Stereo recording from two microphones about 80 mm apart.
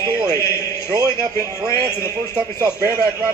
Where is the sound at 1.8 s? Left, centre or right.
Right.